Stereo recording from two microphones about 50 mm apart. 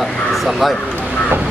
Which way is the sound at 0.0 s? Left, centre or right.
Centre.